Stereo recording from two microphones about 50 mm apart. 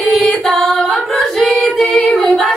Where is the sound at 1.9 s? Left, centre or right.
Centre.